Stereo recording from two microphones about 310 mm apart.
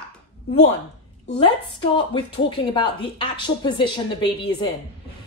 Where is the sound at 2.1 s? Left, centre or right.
Centre.